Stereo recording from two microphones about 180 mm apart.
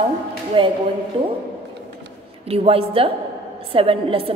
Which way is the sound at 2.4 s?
35° right (ahead or behind).